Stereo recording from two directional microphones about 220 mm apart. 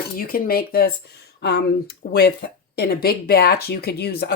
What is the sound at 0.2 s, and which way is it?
Speech, 40° left (ahead or behind).